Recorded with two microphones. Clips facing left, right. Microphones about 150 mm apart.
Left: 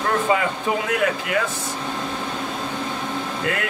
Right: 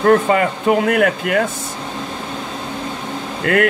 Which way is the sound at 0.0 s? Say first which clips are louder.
Right 7 dB; 55° right (ahead or behind).